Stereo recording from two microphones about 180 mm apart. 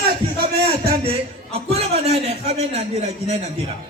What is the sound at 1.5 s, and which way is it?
A man's voice, 35° right (ahead or behind).